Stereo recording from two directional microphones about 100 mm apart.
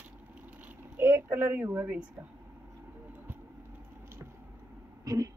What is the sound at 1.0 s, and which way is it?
A woman's voice, 20° right (ahead or behind).